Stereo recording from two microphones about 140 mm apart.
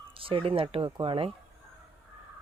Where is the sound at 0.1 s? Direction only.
40° right (ahead or behind).